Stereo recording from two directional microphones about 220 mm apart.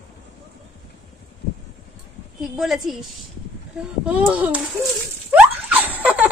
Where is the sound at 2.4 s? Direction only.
Centre (ahead or behind).